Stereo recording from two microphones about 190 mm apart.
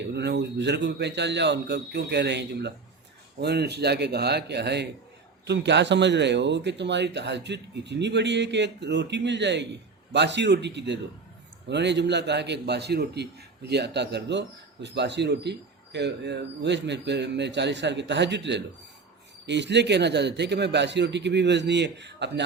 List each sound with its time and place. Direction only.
0.1 s a man's voice: 65° right (ahead or behind)